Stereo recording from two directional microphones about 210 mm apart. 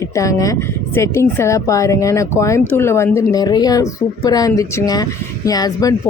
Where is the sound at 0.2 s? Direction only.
15° left (ahead or behind).